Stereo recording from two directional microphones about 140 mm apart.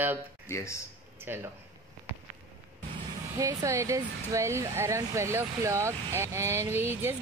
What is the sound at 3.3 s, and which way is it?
Speech, 25° right (ahead or behind).